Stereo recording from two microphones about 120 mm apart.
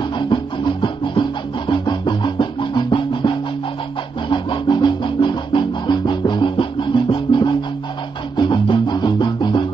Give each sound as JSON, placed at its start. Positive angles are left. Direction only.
{"t": 0.3, "sound": "music", "side_deg": 45}